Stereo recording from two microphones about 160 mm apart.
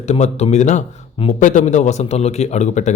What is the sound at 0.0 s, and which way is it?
A man's voice, 45° left (ahead or behind).